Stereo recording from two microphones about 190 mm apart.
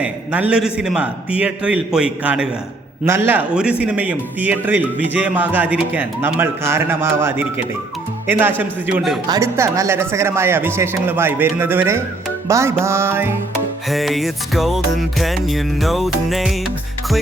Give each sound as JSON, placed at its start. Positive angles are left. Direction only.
{"t": 0.0, "sound": "music", "side_deg": -5}
{"t": 3.0, "sound": "a man's voice", "side_deg": -10}
{"t": 13.9, "sound": "music", "side_deg": 0}